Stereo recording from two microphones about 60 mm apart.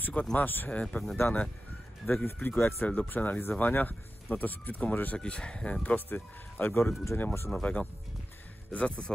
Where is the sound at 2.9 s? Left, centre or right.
Left.